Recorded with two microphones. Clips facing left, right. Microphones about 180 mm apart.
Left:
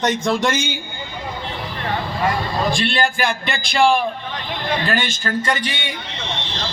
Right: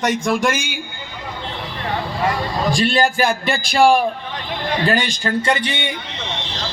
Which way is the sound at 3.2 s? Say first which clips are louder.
Right 4 dB; 5° right (ahead or behind).